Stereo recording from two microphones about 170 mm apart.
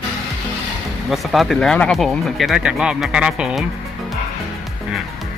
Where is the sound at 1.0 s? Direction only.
Centre (ahead or behind).